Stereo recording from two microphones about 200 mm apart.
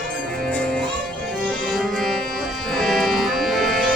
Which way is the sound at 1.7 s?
Centre (ahead or behind).